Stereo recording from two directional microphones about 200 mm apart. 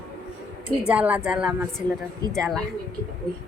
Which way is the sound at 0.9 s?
5° right (ahead or behind).